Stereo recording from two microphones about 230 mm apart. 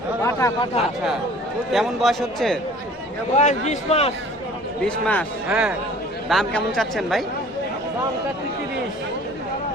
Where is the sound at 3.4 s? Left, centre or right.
Left.